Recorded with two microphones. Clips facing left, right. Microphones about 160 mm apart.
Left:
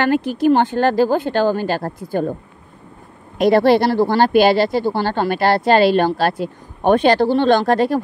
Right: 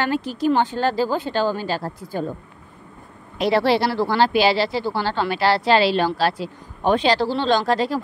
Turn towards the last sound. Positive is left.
turn(degrees=55)  # may be behind; listen again after turning